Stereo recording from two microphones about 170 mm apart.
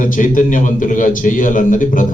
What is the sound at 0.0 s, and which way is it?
A man's voice, 50° left (ahead or behind).